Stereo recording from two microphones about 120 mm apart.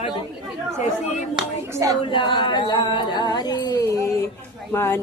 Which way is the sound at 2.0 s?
45° left (ahead or behind).